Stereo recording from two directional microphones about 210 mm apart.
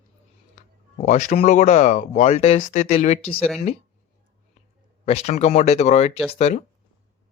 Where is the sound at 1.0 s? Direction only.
35° left (ahead or behind).